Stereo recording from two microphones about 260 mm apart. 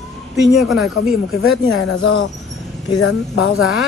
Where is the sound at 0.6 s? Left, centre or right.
Centre.